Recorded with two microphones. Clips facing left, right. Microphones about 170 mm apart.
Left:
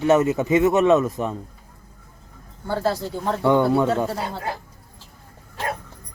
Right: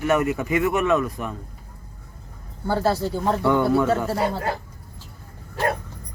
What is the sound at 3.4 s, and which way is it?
Speech, 20° left (ahead or behind).